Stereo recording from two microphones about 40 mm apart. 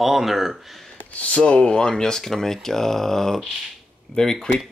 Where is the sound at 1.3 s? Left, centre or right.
Left.